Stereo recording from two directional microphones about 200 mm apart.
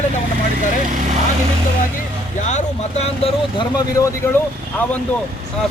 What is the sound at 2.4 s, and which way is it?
Speech, 35° left (ahead or behind).